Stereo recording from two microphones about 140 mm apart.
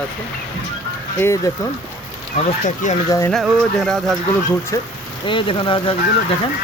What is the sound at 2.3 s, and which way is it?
Speech, 60° left (ahead or behind).